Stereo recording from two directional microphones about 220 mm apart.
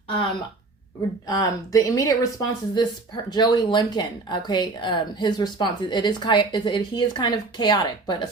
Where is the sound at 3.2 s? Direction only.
20° left (ahead or behind).